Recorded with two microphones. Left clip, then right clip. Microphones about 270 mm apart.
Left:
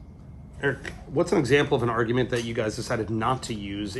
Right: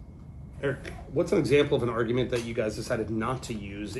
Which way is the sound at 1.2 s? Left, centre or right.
Left.